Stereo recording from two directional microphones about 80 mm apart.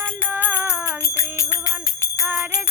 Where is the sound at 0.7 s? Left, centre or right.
Left.